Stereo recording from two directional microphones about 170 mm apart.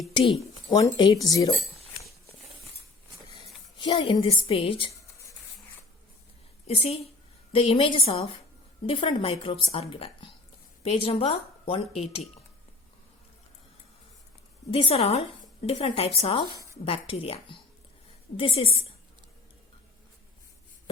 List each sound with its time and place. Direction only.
0.1 s a woman's voice: 30° left (ahead or behind)
3.3 s a woman's voice: 25° left (ahead or behind)
6.7 s a woman's voice: 35° left (ahead or behind)
14.7 s a woman's voice: 35° left (ahead or behind)